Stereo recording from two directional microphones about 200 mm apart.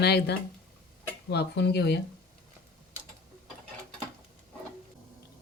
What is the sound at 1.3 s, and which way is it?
Speech, 55° left (ahead or behind).